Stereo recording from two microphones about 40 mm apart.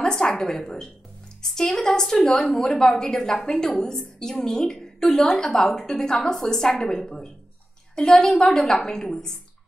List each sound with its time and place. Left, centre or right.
0.0 s a sound: centre
1.4 s a woman's voice: centre
7.9 s a woman's voice: centre